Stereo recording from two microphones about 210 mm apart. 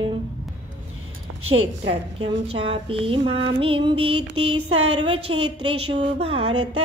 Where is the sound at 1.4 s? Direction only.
25° right (ahead or behind).